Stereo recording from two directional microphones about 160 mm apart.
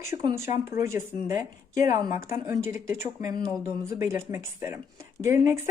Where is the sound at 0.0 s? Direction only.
15° right (ahead or behind).